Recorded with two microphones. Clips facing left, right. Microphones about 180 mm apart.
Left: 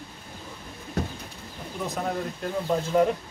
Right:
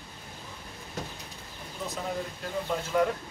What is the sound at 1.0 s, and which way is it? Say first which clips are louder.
Bird: left 8 dB; 60° left (ahead or behind).